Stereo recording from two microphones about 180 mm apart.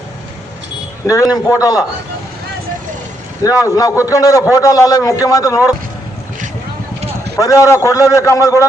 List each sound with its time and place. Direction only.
1.0 s a man's voice: 20° left (ahead or behind)
3.6 s a man's voice: 20° left (ahead or behind)
7.3 s a man's voice: 20° left (ahead or behind)